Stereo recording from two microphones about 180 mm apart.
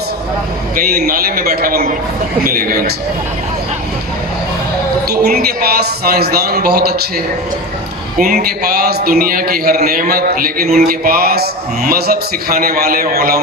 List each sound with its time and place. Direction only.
0.9 s a man's voice: 60° right (ahead or behind)
5.1 s a man's voice: 60° right (ahead or behind)
8.2 s a man's voice: 55° right (ahead or behind)